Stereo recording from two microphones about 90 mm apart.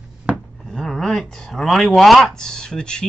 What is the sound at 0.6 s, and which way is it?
Speech, 5° left (ahead or behind).